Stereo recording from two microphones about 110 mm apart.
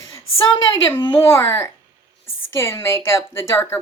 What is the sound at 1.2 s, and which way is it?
Speech, 25° left (ahead or behind).